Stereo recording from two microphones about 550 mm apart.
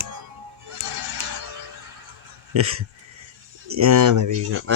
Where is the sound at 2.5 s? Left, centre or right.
Right.